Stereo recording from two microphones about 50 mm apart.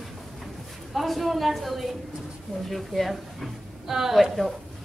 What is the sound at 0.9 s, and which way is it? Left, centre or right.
A woman's voice, centre.